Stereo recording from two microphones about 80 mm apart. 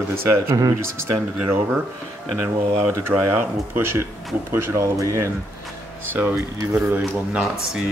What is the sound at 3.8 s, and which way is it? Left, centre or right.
Speech, right.